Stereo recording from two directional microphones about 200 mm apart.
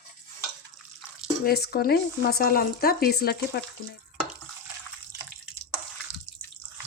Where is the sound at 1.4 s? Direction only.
50° left (ahead or behind).